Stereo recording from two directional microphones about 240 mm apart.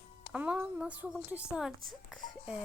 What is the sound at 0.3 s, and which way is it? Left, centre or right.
Speech, centre.